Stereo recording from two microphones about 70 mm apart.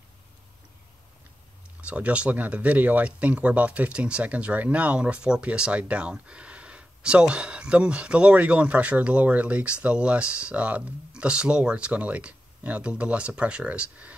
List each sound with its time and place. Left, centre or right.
1.8 s speech: centre